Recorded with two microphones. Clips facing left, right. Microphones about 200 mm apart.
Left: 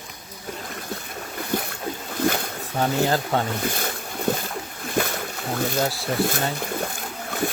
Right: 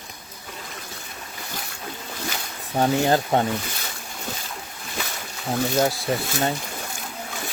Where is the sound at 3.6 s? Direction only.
55° left (ahead or behind).